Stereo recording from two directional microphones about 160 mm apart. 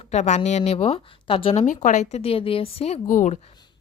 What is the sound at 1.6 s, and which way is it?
A woman's voice, 55° left (ahead or behind).